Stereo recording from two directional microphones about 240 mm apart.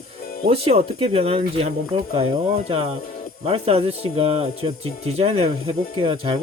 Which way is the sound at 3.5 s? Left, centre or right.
Right.